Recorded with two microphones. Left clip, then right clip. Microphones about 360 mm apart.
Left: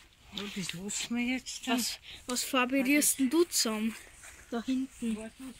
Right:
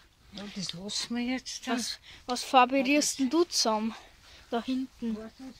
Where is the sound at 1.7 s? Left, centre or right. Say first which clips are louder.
Left 1 dB; centre.